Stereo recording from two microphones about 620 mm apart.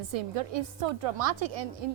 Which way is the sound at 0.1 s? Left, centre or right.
Right.